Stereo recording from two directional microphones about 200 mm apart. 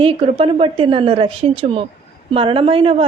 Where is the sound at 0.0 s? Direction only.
25° right (ahead or behind).